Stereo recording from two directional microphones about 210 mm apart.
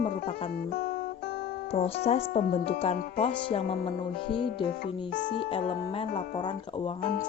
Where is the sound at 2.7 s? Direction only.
25° left (ahead or behind).